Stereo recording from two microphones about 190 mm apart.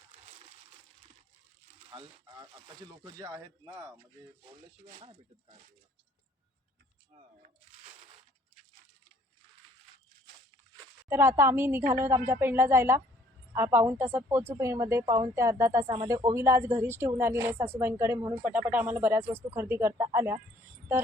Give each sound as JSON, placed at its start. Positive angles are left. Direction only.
{"t": 1.9, "sound": "speech", "side_deg": -25}
{"t": 4.8, "sound": "speech", "side_deg": -35}
{"t": 7.2, "sound": "crunch", "side_deg": -35}
{"t": 11.1, "sound": "a woman's voice", "side_deg": -10}